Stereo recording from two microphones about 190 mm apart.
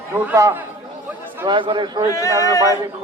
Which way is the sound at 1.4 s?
25° right (ahead or behind).